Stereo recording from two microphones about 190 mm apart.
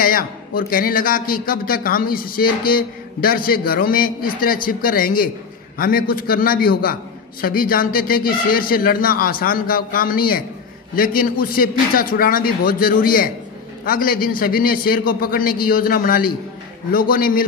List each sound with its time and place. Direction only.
0.0 s a man's voice: 50° left (ahead or behind)